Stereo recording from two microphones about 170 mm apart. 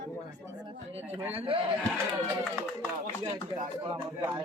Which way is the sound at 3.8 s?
25° right (ahead or behind).